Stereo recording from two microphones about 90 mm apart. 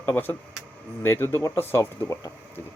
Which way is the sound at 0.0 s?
20° left (ahead or behind).